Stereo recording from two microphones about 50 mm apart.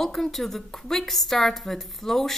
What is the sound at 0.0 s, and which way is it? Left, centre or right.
A woman's voice, centre.